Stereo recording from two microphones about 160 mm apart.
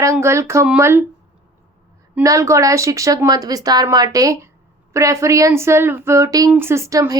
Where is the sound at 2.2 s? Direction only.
20° right (ahead or behind).